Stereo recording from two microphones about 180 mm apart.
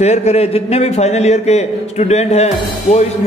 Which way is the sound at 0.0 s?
40° left (ahead or behind).